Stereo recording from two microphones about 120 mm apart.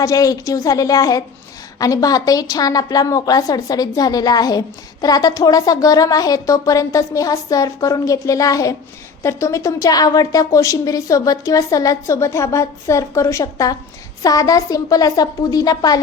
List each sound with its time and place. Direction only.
0.0 s a woman's voice: 30° left (ahead or behind)